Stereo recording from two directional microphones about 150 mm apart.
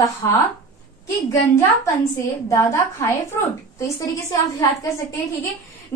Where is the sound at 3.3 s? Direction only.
20° left (ahead or behind).